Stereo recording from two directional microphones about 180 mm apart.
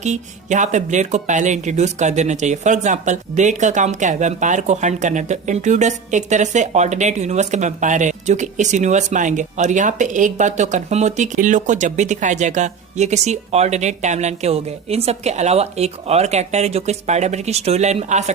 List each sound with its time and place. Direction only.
0.0 s speech: 40° right (ahead or behind)